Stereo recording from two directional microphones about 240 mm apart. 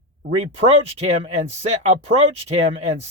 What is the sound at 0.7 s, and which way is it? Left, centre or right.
Speech, right.